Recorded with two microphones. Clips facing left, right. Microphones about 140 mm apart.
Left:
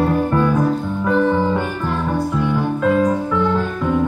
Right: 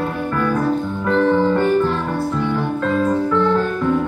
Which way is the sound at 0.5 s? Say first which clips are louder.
Left 1 dB; 10° left (ahead or behind).